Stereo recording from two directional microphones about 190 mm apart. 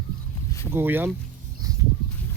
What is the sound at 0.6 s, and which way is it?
Speech, 10° right (ahead or behind).